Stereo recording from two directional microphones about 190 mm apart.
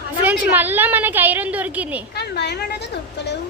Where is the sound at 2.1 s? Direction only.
60° left (ahead or behind).